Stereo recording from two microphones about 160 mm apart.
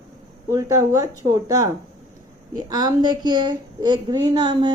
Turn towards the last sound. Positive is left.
turn(degrees=-30)  # may be behind; listen again after turning